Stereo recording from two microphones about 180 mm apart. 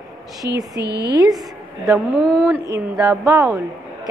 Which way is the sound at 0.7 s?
20° left (ahead or behind).